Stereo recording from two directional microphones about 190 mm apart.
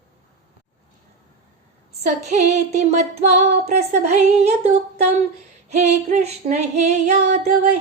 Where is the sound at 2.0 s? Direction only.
35° right (ahead or behind).